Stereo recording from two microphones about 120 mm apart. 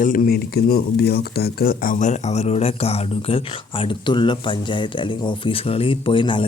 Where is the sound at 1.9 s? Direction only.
85° left.